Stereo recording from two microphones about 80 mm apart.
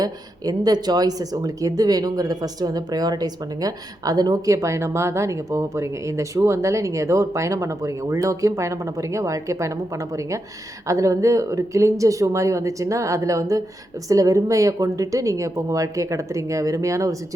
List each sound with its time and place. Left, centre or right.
0.0 s a woman's voice: right